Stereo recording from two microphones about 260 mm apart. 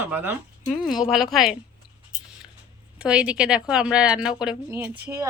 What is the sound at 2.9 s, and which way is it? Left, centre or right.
Speech, centre.